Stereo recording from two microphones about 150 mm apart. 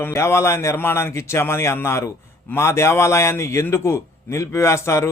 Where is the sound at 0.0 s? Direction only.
20° left (ahead or behind).